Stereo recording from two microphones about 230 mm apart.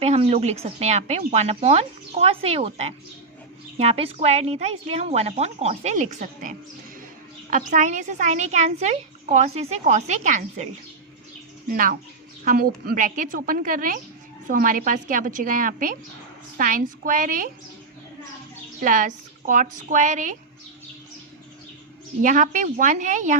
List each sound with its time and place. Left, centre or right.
0.0 s speech: right
7.5 s a child's voice: right
11.7 s a child's voice: right
18.8 s a child's voice: right
22.2 s a child's voice: right